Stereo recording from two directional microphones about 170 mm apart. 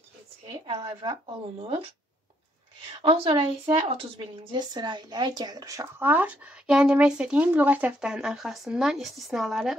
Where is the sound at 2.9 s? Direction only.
30° right (ahead or behind).